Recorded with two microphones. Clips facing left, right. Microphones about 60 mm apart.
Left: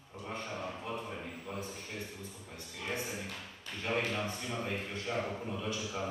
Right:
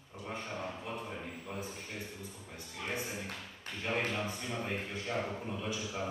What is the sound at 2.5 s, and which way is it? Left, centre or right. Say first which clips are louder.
Speech: even; centre.